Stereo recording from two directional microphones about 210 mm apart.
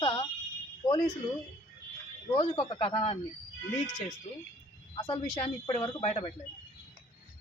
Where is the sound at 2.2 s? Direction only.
25° left (ahead or behind).